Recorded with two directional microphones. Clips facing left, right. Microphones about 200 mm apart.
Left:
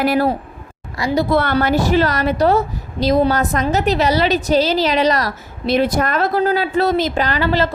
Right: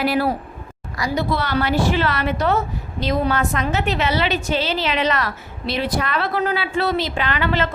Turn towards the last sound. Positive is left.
turn(degrees=35)  # may be behind; listen again after turning